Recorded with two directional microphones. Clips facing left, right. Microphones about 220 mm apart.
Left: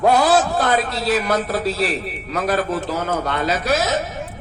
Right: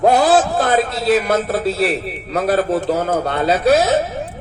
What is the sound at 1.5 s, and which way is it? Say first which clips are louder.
Speech: right 3 dB; 55° right (ahead or behind).